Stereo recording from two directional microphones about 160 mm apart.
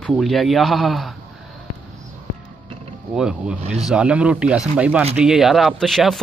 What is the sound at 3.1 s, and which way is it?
Speech, 5° right (ahead or behind).